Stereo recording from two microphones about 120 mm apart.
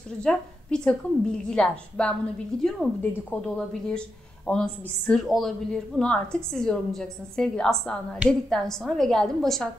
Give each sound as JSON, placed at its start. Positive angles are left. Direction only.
{"t": 0.2, "sound": "a woman's voice", "side_deg": 5}
{"t": 3.0, "sound": "a woman's voice", "side_deg": 15}